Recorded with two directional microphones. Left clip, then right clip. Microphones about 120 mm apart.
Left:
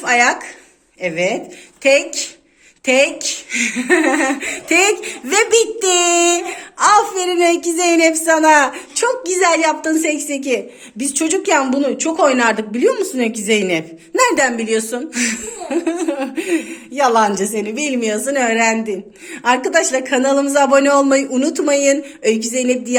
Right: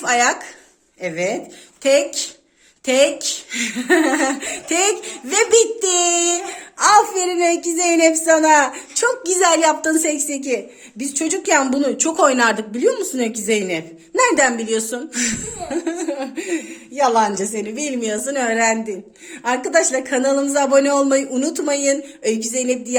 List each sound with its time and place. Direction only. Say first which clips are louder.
0.0 s a woman's voice: left 3 dB; 40° right (ahead or behind); by 6.6 s 15° right (ahead or behind)
6.7 s a woman's voice: left 1 dB; 35° right (ahead or behind); by 9.0 s 20° right (ahead or behind)
9.0 s a woman's voice: left 1 dB; 45° right (ahead or behind)
10.4 s a woman's voice: left 3 dB; 20° right (ahead or behind)
11.6 s a woman's voice: left 2 dB; 60° right (ahead or behind)
12.4 s speech: left 1 dB; 40° right (ahead or behind)
12.7 s a woman's voice: left 3 dB; 20° right (ahead or behind)
14.5 s a woman's voice: left 3 dB; 30° right (ahead or behind)
19.3 s a woman's voice: left 3 dB; 15° right (ahead or behind)